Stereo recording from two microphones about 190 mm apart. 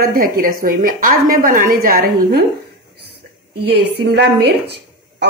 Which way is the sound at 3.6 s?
60° right (ahead or behind).